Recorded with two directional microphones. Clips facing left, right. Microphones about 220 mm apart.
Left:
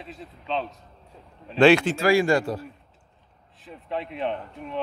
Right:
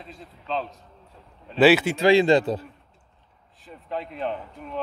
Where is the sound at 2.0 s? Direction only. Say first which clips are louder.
Right 3 dB; 20° right (ahead or behind).